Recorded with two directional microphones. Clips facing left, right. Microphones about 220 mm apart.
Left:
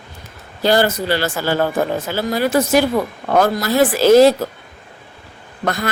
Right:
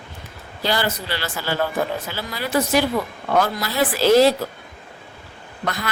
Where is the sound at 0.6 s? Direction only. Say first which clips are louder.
Left 8 dB; 45° left (ahead or behind).